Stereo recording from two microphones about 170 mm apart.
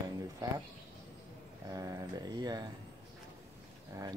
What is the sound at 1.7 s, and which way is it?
Speech, 20° right (ahead or behind).